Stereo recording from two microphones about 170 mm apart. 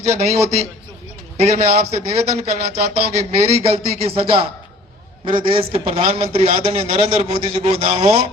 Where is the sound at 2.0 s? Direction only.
35° right (ahead or behind).